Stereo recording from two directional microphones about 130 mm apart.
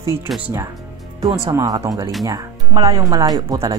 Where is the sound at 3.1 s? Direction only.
25° right (ahead or behind).